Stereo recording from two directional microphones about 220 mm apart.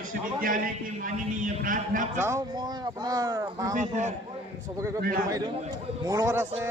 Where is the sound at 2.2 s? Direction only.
15° right (ahead or behind).